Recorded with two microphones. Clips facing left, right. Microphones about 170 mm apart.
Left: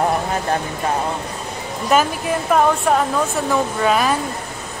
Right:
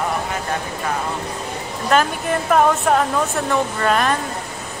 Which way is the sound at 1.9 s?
5° left (ahead or behind).